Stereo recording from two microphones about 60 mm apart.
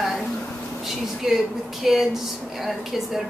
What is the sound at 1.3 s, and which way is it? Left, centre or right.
A woman's voice, centre.